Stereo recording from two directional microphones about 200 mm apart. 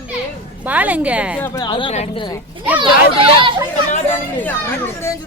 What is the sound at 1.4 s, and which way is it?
Speech, 20° left (ahead or behind).